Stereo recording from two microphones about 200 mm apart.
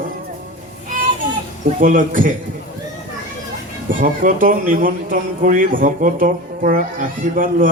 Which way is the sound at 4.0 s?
40° right (ahead or behind).